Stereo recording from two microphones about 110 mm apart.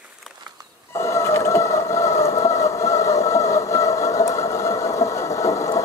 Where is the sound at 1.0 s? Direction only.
25° left (ahead or behind).